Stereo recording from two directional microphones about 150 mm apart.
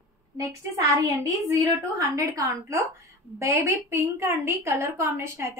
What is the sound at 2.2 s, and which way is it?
A woman's voice, 20° right (ahead or behind).